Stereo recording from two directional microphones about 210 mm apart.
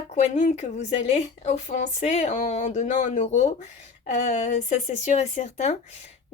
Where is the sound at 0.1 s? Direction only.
35° left (ahead or behind).